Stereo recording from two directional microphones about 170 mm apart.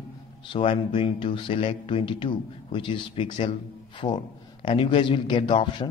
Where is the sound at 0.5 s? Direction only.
30° left (ahead or behind).